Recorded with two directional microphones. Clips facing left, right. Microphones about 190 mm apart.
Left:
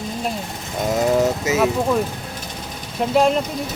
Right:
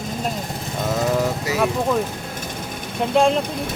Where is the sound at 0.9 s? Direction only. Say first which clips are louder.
Left 3 dB; 20° left (ahead or behind).